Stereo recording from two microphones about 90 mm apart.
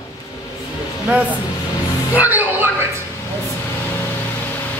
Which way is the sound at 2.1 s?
20° right (ahead or behind).